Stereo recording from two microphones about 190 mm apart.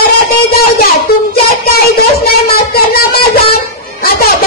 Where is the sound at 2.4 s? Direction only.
55° left (ahead or behind).